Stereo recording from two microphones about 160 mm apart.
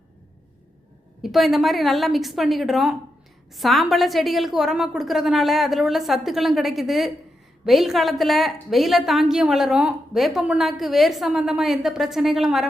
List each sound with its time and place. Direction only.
1.2 s a woman's voice: centre (ahead or behind)